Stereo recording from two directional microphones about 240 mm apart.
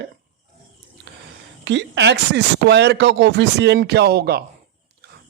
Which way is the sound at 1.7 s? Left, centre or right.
Right.